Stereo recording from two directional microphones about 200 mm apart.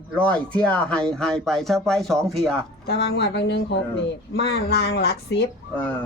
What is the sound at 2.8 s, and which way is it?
Speech, 55° left (ahead or behind).